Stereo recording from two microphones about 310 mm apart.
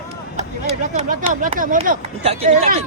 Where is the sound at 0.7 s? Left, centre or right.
Right.